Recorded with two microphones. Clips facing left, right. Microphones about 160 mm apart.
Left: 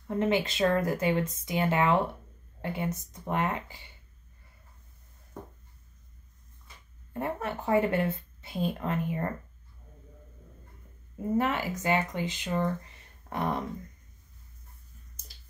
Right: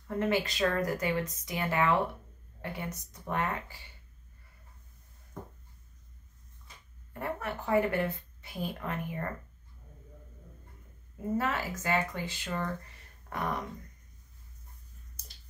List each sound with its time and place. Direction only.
0.1 s speech: 20° left (ahead or behind)
7.2 s speech: 25° left (ahead or behind)
11.3 s speech: 20° left (ahead or behind)